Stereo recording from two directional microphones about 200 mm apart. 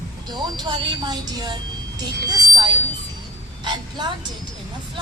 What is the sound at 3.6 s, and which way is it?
Speech, 20° right (ahead or behind).